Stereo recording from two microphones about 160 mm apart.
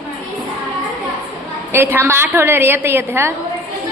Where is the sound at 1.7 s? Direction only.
15° right (ahead or behind).